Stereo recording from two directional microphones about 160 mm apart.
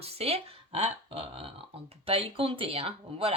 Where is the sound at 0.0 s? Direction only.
40° right (ahead or behind).